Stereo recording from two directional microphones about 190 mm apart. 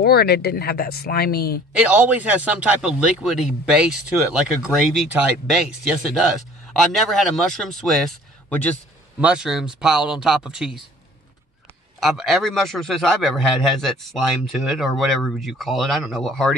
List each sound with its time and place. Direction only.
0.0 s speech: 55° left (ahead or behind)
1.9 s speech: 10° right (ahead or behind)
12.0 s speech: centre (ahead or behind)